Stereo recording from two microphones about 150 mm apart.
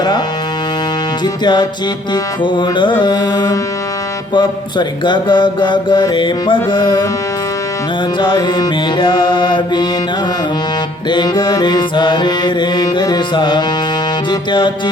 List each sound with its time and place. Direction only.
2.4 s mantra: 30° left (ahead or behind)
3.0 s music: 30° left (ahead or behind)
4.4 s mantra: 30° left (ahead or behind)
8.2 s mantra: 30° left (ahead or behind)
11.1 s music: 25° left (ahead or behind)